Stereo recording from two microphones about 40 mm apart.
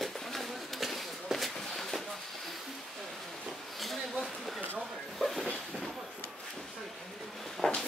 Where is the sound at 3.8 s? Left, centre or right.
Centre.